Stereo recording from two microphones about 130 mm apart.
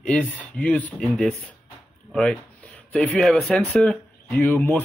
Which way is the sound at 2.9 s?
10° left (ahead or behind).